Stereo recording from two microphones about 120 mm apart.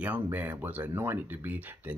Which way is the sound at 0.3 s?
15° right (ahead or behind).